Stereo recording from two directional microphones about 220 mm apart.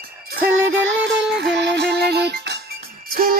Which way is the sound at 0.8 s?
55° right (ahead or behind).